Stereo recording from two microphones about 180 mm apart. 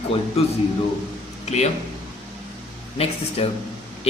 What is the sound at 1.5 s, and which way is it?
Speech, 35° left (ahead or behind).